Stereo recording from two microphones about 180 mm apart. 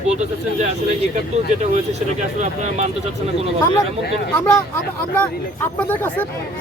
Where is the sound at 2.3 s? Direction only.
40° right (ahead or behind).